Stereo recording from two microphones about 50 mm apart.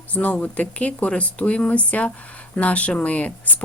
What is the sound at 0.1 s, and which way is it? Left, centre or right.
Speech, left.